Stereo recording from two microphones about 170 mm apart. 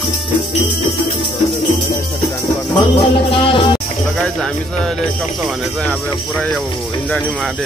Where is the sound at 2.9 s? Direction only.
30° left (ahead or behind).